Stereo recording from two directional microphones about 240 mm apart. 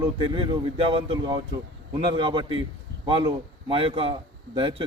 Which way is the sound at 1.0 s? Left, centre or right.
Right.